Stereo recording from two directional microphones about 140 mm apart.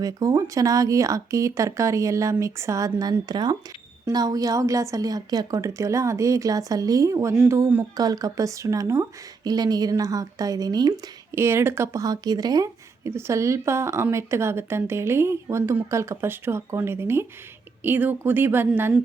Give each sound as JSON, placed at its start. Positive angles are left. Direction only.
{"t": 0.0, "sound": "a woman's voice", "side_deg": -25}